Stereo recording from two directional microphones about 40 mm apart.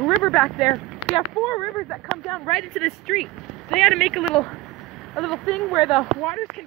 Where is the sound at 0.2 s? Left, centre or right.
Left.